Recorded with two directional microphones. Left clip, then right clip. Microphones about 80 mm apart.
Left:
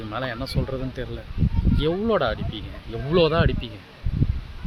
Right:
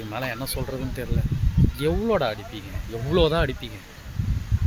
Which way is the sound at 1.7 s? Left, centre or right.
Left.